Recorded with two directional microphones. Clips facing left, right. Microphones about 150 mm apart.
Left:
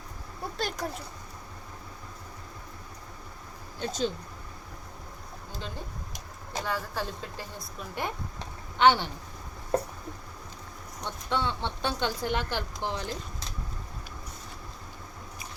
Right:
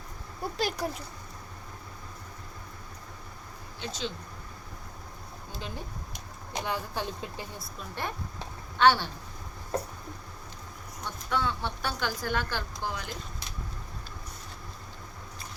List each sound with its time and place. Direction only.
0.5 s speech: 5° right (ahead or behind)
3.8 s speech: 45° left (ahead or behind)
6.6 s speech: 20° right (ahead or behind)
7.8 s a woman's voice: 15° left (ahead or behind)
11.0 s a woman's voice: 25° left (ahead or behind)